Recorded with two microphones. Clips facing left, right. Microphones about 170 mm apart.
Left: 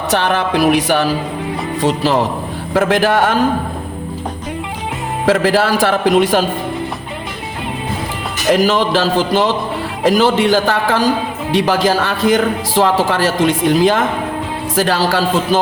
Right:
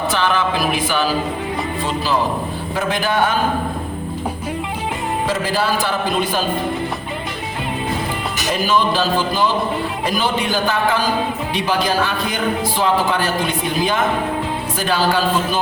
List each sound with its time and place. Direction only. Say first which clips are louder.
0.1 s speech: left 6 dB; 65° left (ahead or behind)
2.7 s a man's voice: left 7 dB; 85° left
5.2 s speech: left 9 dB; 90° left
8.4 s a man's voice: left 5 dB; 80° left